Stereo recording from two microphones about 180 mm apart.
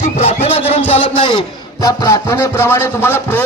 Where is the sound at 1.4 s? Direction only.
20° left (ahead or behind).